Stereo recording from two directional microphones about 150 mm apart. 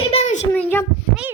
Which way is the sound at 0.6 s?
10° left (ahead or behind).